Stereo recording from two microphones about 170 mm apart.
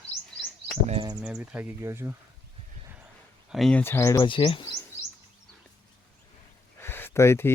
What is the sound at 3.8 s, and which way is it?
Speech, 15° left (ahead or behind).